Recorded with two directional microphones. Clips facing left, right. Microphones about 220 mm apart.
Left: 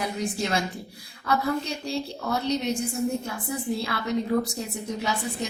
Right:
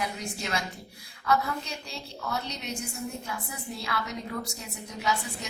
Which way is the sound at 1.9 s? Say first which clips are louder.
Left 8 dB; 35° left (ahead or behind).